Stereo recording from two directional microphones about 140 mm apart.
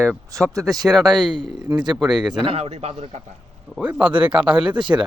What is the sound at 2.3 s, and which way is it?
Speech, 40° right (ahead or behind).